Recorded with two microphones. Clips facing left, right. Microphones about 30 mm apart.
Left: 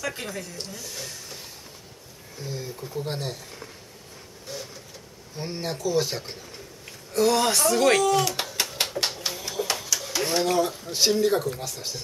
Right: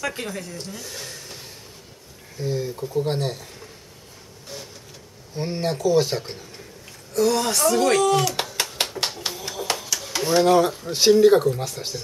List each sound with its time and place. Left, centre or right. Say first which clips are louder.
0.0 s speech: right 3 dB; centre
0.7 s a sound: right 2 dB; centre
2.4 s speech: right 8 dB; centre
5.4 s speech: right 6 dB; centre
7.2 s speech: right 1 dB; centre
8.0 s speech: right 2 dB; centre
8.4 s a sound: right 2 dB; centre
10.3 s speech: right 8 dB; right